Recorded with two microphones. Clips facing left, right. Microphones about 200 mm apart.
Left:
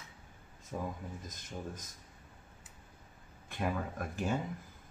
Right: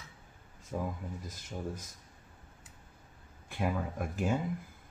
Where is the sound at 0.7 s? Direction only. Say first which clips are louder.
Right 3 dB; 10° right (ahead or behind).